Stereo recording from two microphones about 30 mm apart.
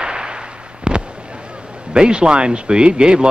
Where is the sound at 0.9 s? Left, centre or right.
Right.